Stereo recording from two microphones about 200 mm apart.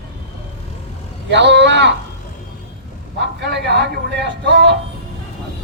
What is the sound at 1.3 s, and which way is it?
Speech, 60° right (ahead or behind).